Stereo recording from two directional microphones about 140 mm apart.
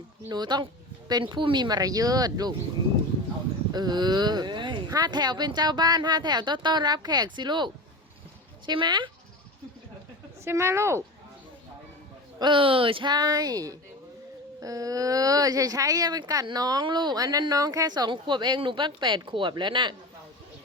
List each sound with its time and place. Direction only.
0.3 s speech: 30° right (ahead or behind)
3.7 s speech: 30° right (ahead or behind)
10.4 s speech: 20° right (ahead or behind)
12.4 s speech: 35° right (ahead or behind)